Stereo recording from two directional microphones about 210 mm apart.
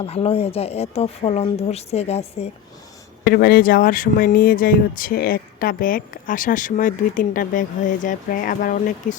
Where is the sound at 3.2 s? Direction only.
45° left (ahead or behind).